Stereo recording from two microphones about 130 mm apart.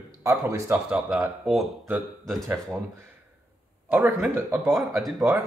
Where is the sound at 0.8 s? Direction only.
10° right (ahead or behind).